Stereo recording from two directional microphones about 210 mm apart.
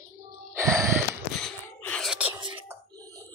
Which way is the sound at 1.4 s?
5° left (ahead or behind).